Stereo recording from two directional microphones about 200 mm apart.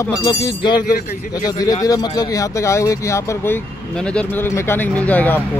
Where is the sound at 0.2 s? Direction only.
20° left (ahead or behind).